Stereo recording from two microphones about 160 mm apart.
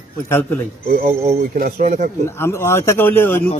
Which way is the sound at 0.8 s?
65° right (ahead or behind).